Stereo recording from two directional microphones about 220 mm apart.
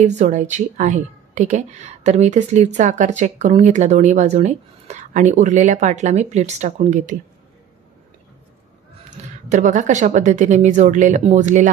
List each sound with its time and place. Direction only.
0.0 s a woman's voice: 30° right (ahead or behind)
9.1 s a woman's voice: 35° right (ahead or behind)